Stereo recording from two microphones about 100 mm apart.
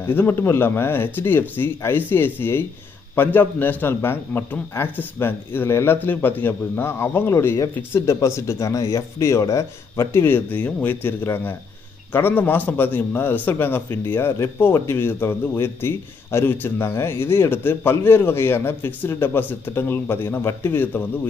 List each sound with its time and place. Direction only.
0.0 s a man's voice: 20° left (ahead or behind)